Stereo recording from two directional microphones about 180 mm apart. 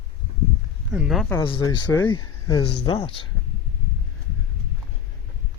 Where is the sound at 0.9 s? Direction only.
5° right (ahead or behind).